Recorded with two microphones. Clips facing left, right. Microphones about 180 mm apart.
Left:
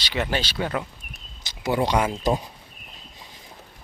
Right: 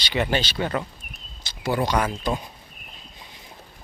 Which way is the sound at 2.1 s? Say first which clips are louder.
Left 3 dB; 35° left (ahead or behind).